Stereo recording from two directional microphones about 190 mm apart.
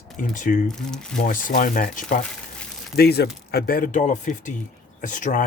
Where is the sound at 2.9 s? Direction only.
55° left (ahead or behind).